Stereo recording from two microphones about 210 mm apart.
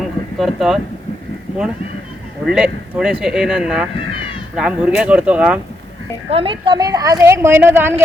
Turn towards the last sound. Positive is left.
turn(degrees=-10)  # may be behind; listen again after turning